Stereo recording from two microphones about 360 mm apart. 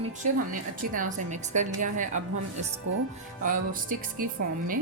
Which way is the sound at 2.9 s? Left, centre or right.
Right.